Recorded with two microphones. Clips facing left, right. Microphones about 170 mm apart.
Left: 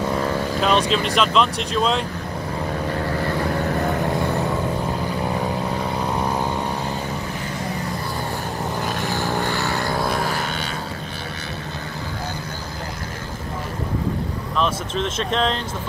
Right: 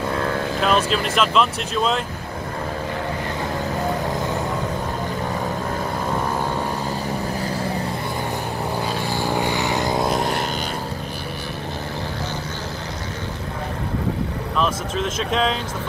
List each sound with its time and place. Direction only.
0.6 s speech: 5° right (ahead or behind)
9.0 s vehicle: 15° right (ahead or behind)
14.6 s speech: 5° right (ahead or behind)